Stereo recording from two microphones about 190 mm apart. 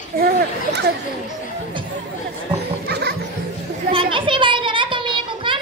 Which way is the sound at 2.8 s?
60° right (ahead or behind).